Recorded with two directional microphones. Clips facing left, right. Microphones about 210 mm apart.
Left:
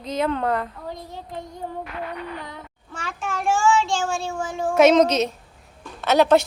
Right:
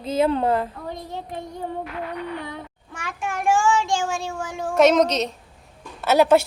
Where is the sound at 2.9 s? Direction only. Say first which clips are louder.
Even; 15° right (ahead or behind).